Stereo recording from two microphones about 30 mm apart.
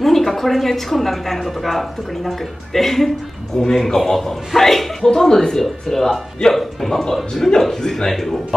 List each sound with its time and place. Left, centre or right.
0.0 s a woman's voice: centre